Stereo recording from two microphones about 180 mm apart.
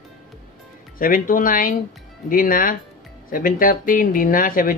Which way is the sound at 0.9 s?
50° left (ahead or behind).